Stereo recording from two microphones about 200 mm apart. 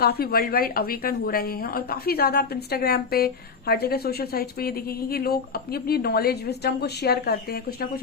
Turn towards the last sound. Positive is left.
turn(degrees=50)  # may be behind; listen again after turning